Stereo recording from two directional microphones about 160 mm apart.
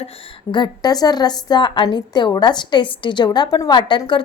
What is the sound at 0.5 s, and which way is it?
A woman's voice, 25° left (ahead or behind).